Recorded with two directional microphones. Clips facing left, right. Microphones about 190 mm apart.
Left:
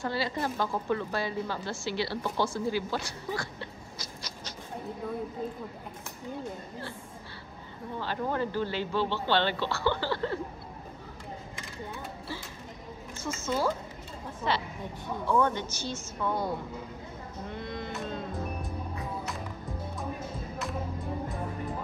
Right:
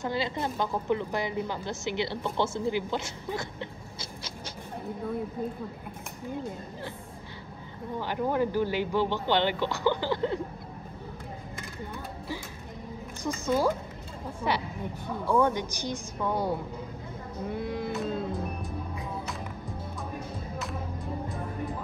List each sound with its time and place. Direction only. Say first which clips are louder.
0.0 s a woman's voice: right 1 dB; 20° right (ahead or behind)
8.0 s speech: right 3 dB; 15° right (ahead or behind)
13.2 s speech: right 3 dB; 15° right (ahead or behind)
17.5 s music: right 6 dB; 10° right (ahead or behind)